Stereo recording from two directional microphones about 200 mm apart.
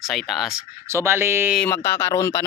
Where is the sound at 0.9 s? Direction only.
10° right (ahead or behind).